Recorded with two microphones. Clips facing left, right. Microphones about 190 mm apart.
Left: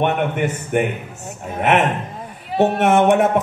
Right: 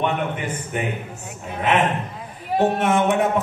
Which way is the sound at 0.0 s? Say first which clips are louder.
Left 5 dB; 60° left (ahead or behind).